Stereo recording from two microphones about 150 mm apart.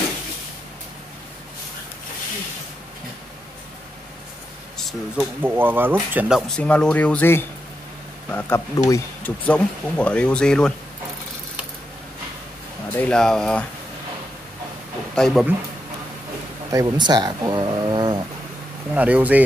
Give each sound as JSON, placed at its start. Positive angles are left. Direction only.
{"t": 4.8, "sound": "speech", "side_deg": -5}
{"t": 6.6, "sound": "speech", "side_deg": 10}
{"t": 9.5, "sound": "speech", "side_deg": 10}
{"t": 12.9, "sound": "speech", "side_deg": 10}
{"t": 15.1, "sound": "speech", "side_deg": 5}
{"t": 16.7, "sound": "speech", "side_deg": -30}
{"t": 18.9, "sound": "speech", "side_deg": -10}